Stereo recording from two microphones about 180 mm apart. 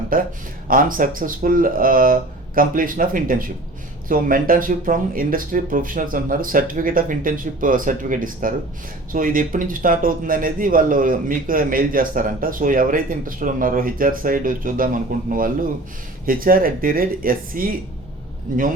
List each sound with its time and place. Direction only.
0.1 s a man's voice: 50° right (ahead or behind)